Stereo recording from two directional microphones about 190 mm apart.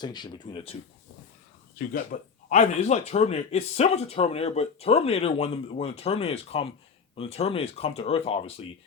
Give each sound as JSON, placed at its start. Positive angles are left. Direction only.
{"t": 0.0, "sound": "speech", "side_deg": 20}
{"t": 1.9, "sound": "a man's voice", "side_deg": 45}